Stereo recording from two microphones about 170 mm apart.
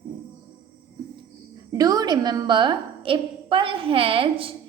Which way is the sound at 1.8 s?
25° right (ahead or behind).